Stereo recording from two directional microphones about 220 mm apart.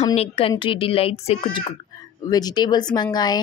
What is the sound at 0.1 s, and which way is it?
Speech, 25° left (ahead or behind).